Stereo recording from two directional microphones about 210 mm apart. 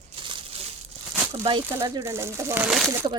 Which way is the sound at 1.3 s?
25° right (ahead or behind).